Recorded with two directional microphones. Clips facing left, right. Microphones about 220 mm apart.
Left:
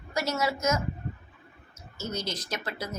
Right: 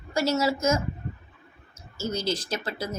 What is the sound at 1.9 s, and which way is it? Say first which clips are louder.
Speech: right 5 dB; 30° right (ahead or behind).